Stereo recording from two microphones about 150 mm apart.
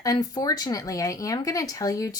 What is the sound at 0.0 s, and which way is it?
Speech, 25° left (ahead or behind).